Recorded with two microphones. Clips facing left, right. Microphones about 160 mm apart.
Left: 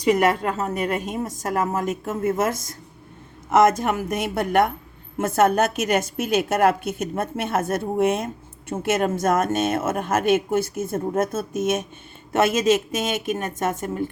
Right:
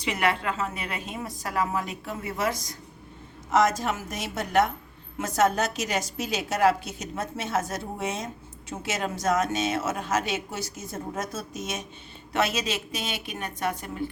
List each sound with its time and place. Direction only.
0.0 s a woman's voice: 45° left (ahead or behind)